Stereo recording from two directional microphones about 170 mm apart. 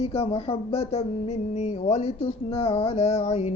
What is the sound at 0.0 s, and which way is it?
Speech, 35° left (ahead or behind).